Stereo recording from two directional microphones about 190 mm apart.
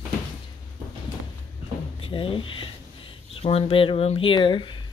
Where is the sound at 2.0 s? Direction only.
25° left (ahead or behind).